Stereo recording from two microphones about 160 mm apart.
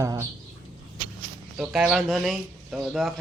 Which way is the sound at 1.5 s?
5° right (ahead or behind).